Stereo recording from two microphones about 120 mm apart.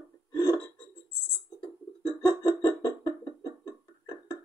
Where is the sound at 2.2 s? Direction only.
30° left (ahead or behind).